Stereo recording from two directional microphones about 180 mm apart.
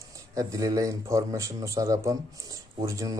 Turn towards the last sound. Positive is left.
turn(degrees=-20)  # may be behind; listen again after turning